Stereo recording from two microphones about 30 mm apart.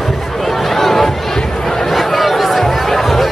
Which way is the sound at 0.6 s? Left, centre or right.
Centre.